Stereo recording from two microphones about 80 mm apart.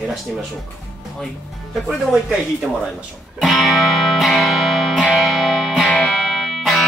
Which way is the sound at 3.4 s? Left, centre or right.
Centre.